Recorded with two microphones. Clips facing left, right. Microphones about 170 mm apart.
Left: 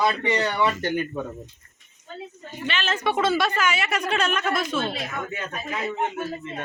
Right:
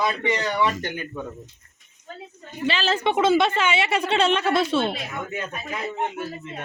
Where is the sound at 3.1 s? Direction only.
20° right (ahead or behind).